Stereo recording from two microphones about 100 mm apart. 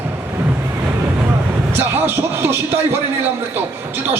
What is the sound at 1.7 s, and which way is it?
Speech, 20° right (ahead or behind).